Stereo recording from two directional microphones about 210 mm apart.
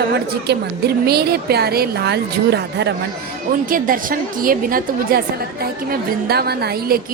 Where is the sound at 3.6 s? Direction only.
40° right (ahead or behind).